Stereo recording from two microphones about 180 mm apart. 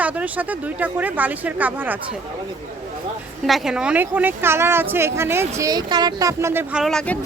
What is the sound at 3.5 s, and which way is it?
A woman's voice, centre (ahead or behind).